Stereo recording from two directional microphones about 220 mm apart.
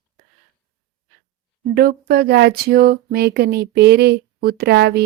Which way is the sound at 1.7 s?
45° right (ahead or behind).